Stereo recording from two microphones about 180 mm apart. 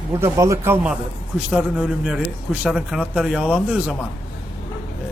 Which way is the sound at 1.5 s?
5° right (ahead or behind).